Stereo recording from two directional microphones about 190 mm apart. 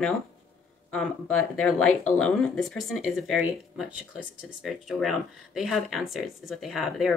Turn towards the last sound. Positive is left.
turn(degrees=0)  # may be behind; listen again after turning